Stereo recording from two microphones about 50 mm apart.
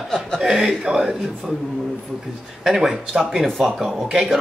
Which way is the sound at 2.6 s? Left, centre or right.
Centre.